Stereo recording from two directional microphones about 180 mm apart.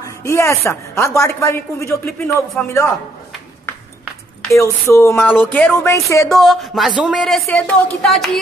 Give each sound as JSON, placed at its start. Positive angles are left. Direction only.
{"t": 0.0, "sound": "a woman's voice", "side_deg": 15}
{"t": 4.5, "sound": "a woman's voice", "side_deg": 15}
{"t": 6.2, "sound": "speech", "side_deg": 0}